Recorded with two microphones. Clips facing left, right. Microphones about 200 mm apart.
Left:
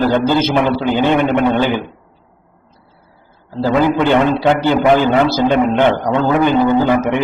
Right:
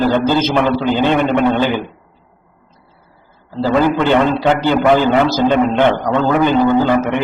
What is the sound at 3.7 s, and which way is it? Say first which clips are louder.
A man's voice: even; 15° left (ahead or behind).